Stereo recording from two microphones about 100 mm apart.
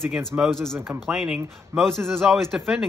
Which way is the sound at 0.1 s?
Centre (ahead or behind).